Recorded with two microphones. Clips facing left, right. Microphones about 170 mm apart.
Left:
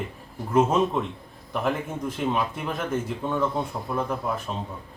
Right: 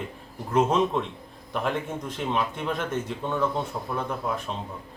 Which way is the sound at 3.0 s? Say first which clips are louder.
Left 1 dB; 5° left (ahead or behind).